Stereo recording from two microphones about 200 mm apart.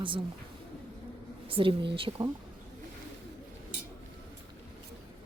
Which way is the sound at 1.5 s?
25° right (ahead or behind).